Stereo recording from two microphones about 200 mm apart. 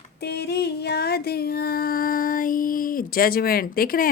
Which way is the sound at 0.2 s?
55° left (ahead or behind).